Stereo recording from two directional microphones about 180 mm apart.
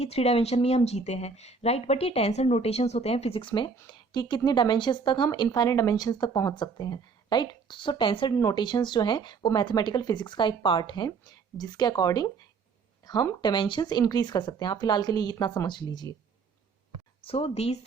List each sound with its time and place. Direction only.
0.0 s speech: 35° left (ahead or behind)
17.2 s speech: 35° left (ahead or behind)